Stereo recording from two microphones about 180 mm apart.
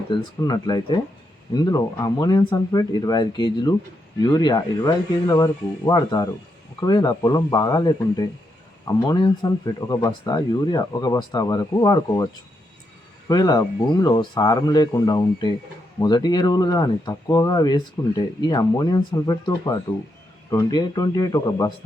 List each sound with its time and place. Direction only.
0.1 s speech: 25° left (ahead or behind)